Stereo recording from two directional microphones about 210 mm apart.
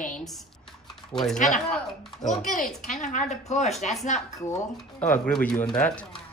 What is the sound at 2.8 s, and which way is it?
Speech, 35° left (ahead or behind).